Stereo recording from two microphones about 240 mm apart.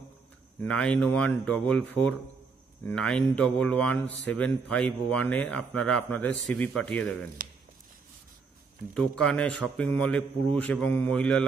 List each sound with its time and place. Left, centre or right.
0.6 s speech: centre
7.4 s a sound: right
8.9 s speech: centre